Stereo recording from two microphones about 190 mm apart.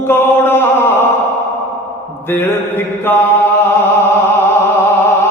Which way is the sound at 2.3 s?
10° left (ahead or behind).